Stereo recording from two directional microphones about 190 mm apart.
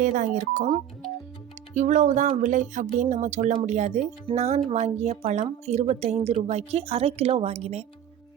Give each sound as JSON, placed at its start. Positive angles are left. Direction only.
{"t": 0.0, "sound": "speech", "side_deg": -40}